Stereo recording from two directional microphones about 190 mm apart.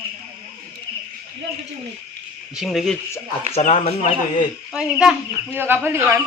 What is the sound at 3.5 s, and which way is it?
Speech, 40° left (ahead or behind).